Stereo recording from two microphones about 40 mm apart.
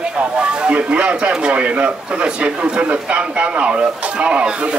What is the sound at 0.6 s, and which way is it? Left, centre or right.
A man's voice, right.